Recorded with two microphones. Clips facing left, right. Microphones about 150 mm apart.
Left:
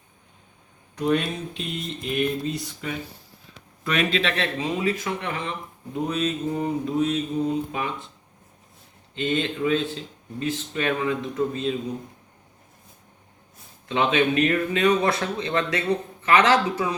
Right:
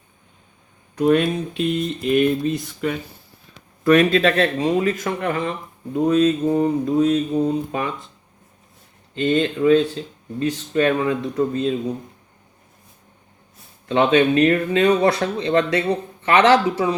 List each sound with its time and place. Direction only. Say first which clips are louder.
0.9 s speech: right 7 dB; 60° right (ahead or behind)
3.8 s speech: right 9 dB; 45° right (ahead or behind)
9.1 s speech: right 6 dB; 40° right (ahead or behind)
13.8 s speech: right 6 dB; 40° right (ahead or behind)